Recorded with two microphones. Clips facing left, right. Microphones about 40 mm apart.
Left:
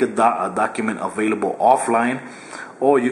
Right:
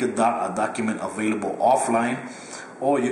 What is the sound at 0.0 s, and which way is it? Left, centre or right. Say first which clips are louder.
Speech: left 4 dB; centre.